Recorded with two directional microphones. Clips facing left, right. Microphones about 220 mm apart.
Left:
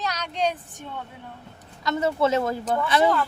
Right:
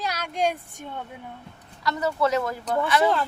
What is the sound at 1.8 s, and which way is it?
Speech, 25° left (ahead or behind).